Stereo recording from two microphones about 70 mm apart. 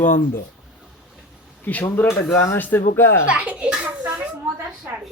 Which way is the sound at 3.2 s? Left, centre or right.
Centre.